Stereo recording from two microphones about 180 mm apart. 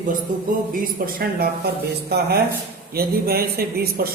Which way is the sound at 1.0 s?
55° right (ahead or behind).